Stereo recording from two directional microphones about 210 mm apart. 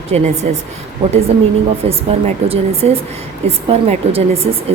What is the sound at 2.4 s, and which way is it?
A woman's voice, 30° right (ahead or behind).